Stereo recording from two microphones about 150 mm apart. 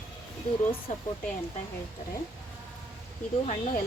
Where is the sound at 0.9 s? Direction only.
55° left (ahead or behind).